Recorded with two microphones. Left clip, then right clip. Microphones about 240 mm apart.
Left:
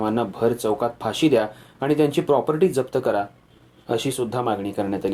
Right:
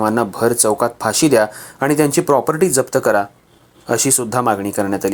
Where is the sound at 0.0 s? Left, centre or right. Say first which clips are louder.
Right 6 dB; right.